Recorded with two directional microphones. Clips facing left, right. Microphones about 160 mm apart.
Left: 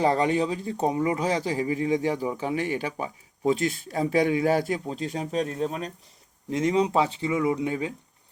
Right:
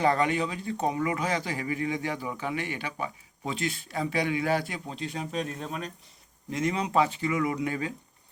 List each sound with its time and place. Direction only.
0.0 s speech: 35° left (ahead or behind)